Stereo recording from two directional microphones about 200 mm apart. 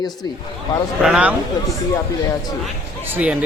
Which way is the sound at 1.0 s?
5° right (ahead or behind).